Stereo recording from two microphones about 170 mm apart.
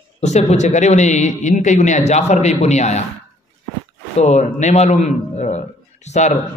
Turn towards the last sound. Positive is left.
turn(degrees=45)  # may be behind; listen again after turning